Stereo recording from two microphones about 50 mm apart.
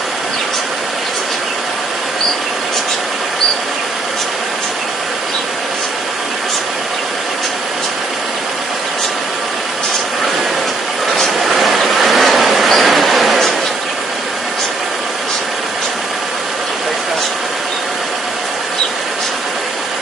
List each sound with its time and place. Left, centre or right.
11.1 s vehicle: centre